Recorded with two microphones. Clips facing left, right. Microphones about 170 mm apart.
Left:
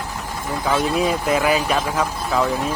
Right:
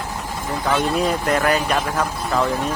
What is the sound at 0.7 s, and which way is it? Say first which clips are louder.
Speech: even; centre (ahead or behind).